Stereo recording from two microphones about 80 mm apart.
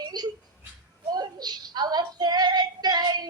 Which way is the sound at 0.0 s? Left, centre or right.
Right.